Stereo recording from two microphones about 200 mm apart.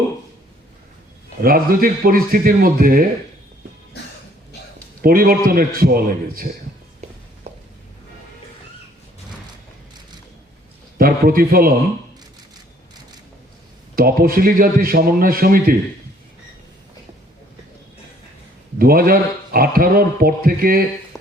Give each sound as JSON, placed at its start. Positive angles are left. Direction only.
{"t": 1.4, "sound": "speech", "side_deg": -45}
{"t": 5.0, "sound": "speech", "side_deg": -45}
{"t": 10.9, "sound": "speech", "side_deg": -45}
{"t": 13.9, "sound": "speech", "side_deg": -45}
{"t": 18.8, "sound": "speech", "side_deg": -45}